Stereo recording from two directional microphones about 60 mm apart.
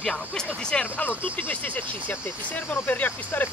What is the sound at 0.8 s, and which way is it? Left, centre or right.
Speech, left.